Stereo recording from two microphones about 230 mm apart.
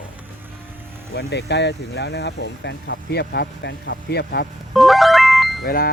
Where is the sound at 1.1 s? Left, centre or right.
Left.